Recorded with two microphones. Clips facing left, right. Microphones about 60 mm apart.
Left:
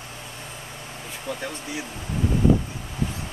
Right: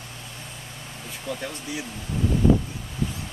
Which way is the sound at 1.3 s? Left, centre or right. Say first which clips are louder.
Even; centre.